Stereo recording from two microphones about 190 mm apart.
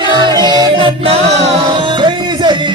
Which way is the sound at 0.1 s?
25° right (ahead or behind).